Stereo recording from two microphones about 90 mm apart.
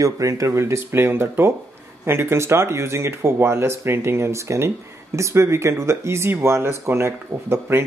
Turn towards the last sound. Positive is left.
turn(degrees=-30)  # may be behind; listen again after turning